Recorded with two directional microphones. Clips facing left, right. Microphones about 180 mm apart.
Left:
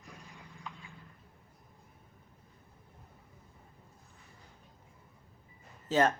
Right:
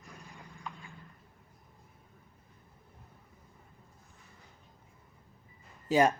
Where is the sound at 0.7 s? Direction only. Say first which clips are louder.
Right 3 dB; 50° right (ahead or behind).